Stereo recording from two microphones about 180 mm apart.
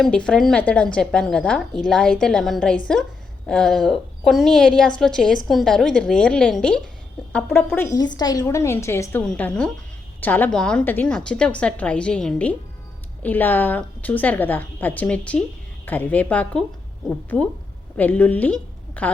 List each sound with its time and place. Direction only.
0.0 s a woman's voice: 5° left (ahead or behind)
7.9 s a woman's voice: 25° left (ahead or behind)